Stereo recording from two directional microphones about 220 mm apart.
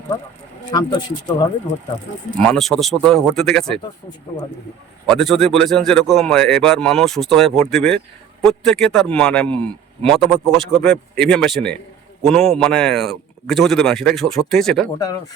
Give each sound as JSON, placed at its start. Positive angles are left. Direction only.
{"t": 0.7, "sound": "speech", "side_deg": 20}
{"t": 2.3, "sound": "a man's voice", "side_deg": 0}
{"t": 5.0, "sound": "a man's voice", "side_deg": 0}